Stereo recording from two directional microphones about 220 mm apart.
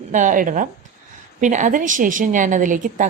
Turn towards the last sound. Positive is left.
turn(degrees=-35)  # may be behind; listen again after turning